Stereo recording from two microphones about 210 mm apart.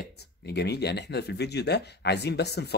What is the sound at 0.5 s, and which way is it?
Speech, 50° left (ahead or behind).